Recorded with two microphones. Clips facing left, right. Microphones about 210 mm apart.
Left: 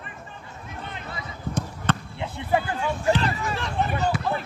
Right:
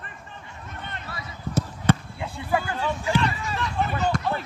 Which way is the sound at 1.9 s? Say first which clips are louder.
Right 4 dB; 10° right (ahead or behind).